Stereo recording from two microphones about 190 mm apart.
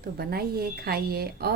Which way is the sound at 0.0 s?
55° right (ahead or behind).